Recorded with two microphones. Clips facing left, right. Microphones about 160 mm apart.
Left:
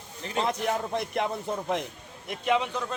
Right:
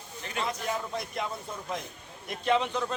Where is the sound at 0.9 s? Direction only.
60° left (ahead or behind).